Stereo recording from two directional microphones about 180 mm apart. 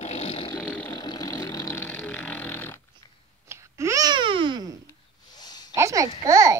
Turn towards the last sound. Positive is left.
turn(degrees=-20)  # may be behind; listen again after turning